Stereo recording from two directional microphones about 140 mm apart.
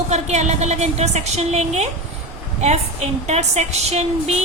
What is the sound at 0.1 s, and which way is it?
A woman's voice, 55° right (ahead or behind).